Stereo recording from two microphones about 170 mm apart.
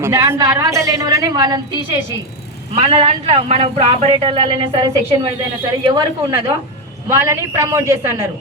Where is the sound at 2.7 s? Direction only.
35° right (ahead or behind).